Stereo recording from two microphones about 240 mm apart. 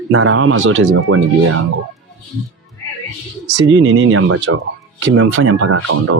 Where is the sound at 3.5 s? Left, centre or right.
Right.